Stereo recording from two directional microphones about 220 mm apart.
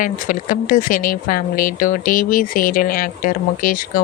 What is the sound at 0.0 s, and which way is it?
Speech, 35° left (ahead or behind).